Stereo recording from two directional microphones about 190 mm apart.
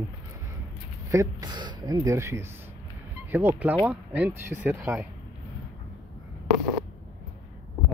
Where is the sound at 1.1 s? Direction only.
20° right (ahead or behind).